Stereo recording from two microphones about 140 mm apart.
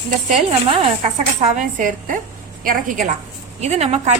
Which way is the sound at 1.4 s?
65° right (ahead or behind).